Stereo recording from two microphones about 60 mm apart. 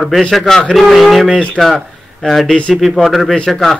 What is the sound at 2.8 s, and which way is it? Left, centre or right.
Speech, centre.